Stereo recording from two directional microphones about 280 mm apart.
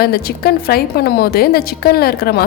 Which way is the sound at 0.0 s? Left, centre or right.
Left.